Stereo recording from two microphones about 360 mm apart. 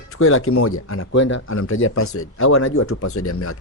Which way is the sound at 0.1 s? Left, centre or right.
Left.